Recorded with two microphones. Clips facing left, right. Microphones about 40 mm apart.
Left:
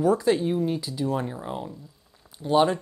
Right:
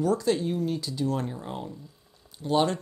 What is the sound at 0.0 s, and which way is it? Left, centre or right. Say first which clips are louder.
Speech: left 3 dB; centre.